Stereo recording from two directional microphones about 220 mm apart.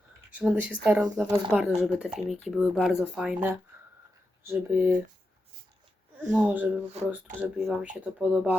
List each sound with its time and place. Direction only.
0.3 s speech: 5° right (ahead or behind)
6.3 s speech: 5° right (ahead or behind)